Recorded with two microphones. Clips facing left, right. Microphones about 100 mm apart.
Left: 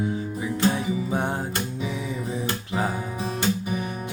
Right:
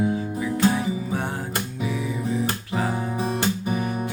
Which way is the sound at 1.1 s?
20° left (ahead or behind).